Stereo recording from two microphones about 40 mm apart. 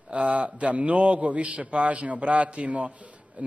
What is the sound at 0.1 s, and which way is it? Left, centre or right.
Speech, right.